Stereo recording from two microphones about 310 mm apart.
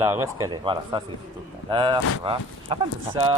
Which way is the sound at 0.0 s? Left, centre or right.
Centre.